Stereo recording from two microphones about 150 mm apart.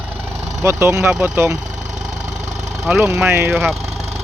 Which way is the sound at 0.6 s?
15° right (ahead or behind).